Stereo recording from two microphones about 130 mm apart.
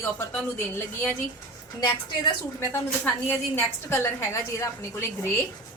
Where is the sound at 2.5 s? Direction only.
15° left (ahead or behind).